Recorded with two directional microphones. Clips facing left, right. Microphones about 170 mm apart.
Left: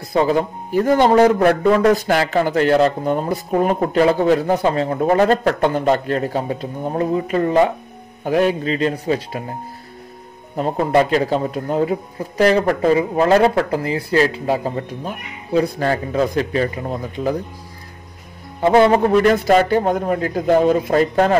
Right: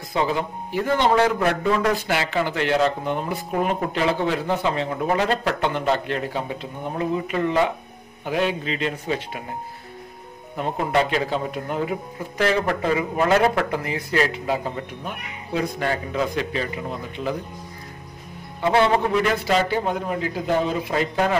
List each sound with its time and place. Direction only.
0.1 s a man's voice: 45° left (ahead or behind)
10.5 s speech: 40° left (ahead or behind)
18.6 s a man's voice: 45° left (ahead or behind)